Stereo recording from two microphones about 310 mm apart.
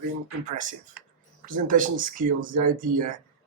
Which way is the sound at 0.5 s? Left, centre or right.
Right.